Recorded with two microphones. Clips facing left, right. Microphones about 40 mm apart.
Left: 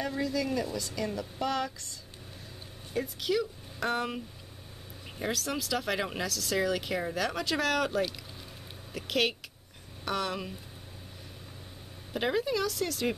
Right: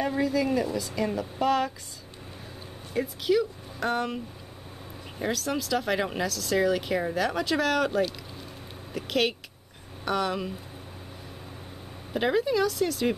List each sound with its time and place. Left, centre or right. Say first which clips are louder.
0.0 s a woman's voice: right 5 dB; right
2.9 s speech: right 5 dB; centre
5.2 s speech: right 4 dB; centre
12.1 s speech: right 4 dB; centre